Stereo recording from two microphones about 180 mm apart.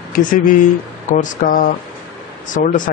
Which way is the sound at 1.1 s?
45° left (ahead or behind).